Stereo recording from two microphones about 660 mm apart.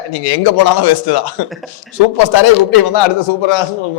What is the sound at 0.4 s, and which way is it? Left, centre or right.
A man's voice, left.